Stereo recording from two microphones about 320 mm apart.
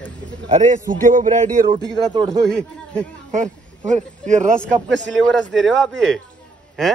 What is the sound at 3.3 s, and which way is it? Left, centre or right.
Speech, right.